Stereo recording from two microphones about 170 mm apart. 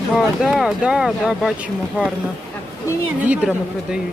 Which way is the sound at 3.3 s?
5° right (ahead or behind).